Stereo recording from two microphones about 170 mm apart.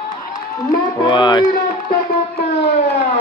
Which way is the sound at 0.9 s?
25° left (ahead or behind).